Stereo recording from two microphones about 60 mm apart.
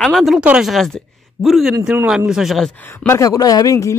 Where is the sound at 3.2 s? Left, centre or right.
Left.